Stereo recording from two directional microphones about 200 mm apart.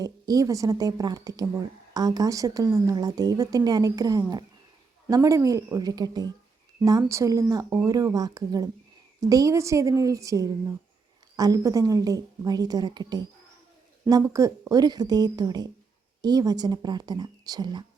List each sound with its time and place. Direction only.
0.0 s a woman's voice: 15° right (ahead or behind)